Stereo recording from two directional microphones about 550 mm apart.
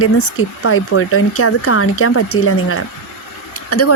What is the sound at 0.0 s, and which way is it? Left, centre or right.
Speech, left.